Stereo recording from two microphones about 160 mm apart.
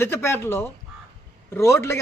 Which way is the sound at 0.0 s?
15° left (ahead or behind).